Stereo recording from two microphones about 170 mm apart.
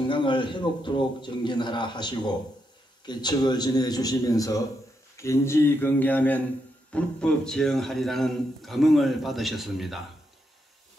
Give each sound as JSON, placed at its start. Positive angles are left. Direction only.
{"t": 0.1, "sound": "a man's voice", "side_deg": 30}